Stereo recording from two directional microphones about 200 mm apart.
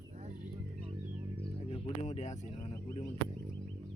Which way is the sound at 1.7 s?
35° left (ahead or behind).